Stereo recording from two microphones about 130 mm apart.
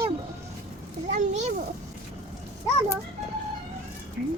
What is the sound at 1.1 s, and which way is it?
Speech, 65° right (ahead or behind).